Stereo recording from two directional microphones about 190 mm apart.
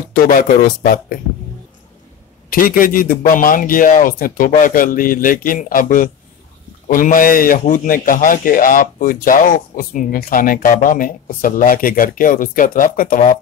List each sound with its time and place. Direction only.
0.1 s a man's voice: 45° left (ahead or behind)
2.5 s a man's voice: 45° left (ahead or behind)